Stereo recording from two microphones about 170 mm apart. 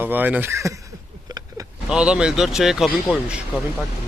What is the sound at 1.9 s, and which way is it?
Speech, 5° right (ahead or behind).